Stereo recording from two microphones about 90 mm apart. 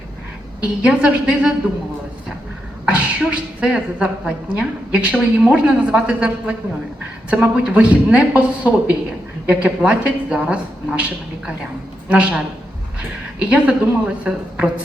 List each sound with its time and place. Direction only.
0.6 s speech: 10° right (ahead or behind)
2.8 s speech: 10° right (ahead or behind)
12.0 s speech: 15° right (ahead or behind)
13.4 s speech: 15° right (ahead or behind)